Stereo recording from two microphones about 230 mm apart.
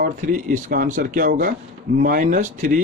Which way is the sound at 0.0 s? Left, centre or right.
Right.